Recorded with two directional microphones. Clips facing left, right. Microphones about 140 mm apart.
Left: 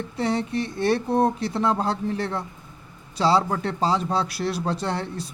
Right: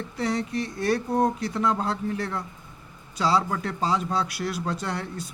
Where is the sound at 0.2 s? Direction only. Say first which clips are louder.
Left 2 dB; 25° left (ahead or behind).